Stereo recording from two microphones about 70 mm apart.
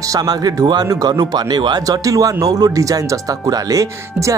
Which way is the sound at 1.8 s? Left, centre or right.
Right.